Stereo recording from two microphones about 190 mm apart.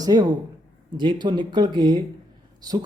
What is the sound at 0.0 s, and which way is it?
Speech, 20° right (ahead or behind).